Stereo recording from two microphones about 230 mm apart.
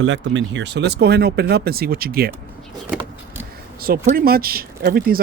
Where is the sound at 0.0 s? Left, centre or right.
Right.